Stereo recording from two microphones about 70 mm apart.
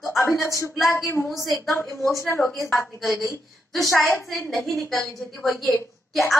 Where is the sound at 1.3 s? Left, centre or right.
Centre.